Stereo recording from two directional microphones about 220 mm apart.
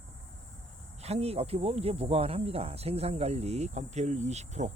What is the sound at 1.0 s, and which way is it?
Speech, 30° right (ahead or behind).